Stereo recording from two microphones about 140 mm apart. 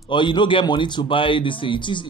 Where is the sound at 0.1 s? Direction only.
35° left (ahead or behind).